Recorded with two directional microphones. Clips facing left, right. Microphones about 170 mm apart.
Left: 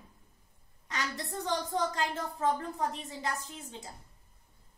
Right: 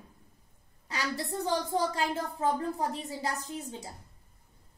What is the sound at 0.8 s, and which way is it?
A woman's voice, 30° right (ahead or behind).